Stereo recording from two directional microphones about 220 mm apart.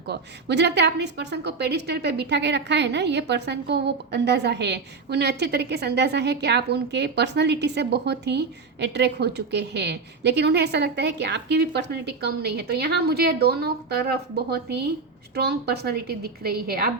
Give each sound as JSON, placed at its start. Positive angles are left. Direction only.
{"t": 0.1, "sound": "a woman's voice", "side_deg": -50}